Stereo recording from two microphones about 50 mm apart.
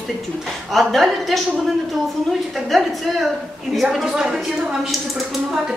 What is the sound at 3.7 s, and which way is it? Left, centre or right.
Speech, centre.